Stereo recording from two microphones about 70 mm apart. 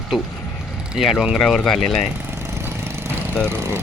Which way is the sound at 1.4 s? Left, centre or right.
Centre.